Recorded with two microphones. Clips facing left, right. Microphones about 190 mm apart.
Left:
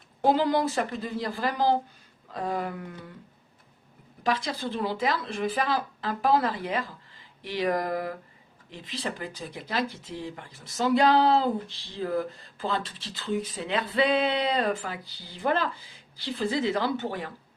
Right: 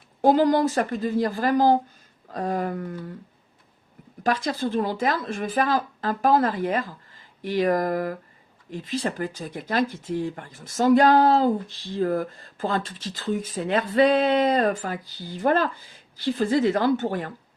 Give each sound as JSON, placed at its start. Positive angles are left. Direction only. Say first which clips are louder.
{"t": 0.2, "sound": "speech", "louder": "right 5 dB", "side_deg": -45}
{"t": 4.2, "sound": "speech", "louder": "right 4 dB", "side_deg": -45}